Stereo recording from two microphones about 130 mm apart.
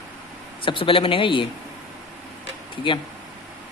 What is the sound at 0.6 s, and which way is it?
Speech, 40° left (ahead or behind).